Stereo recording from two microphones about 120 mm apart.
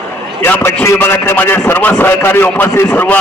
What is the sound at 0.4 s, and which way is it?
A man's voice, 15° left (ahead or behind).